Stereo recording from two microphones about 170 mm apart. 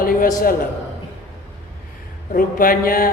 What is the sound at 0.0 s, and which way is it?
Speech, 55° left (ahead or behind).